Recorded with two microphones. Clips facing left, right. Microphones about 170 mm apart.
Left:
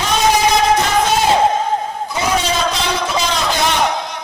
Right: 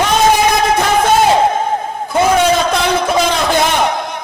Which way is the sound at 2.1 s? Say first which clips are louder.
Right 7 dB; 55° right (ahead or behind).